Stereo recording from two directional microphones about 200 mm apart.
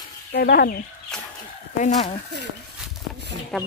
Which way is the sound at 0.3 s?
50° left (ahead or behind).